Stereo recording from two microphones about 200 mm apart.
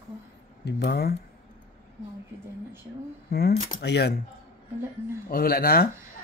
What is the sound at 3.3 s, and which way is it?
Speech, 55° left (ahead or behind).